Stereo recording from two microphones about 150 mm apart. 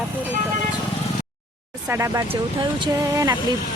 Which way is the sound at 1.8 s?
20° right (ahead or behind).